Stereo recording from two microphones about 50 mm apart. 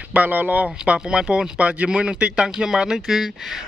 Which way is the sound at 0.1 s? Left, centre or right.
Right.